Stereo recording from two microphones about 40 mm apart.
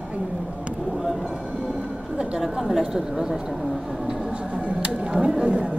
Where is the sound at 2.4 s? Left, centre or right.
Centre.